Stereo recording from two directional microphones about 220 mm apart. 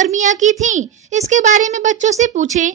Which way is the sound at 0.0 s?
35° right (ahead or behind).